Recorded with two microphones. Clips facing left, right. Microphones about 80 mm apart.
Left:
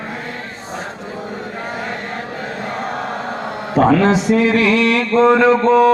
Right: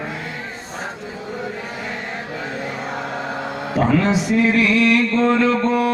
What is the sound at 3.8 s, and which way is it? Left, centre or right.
Speech, left.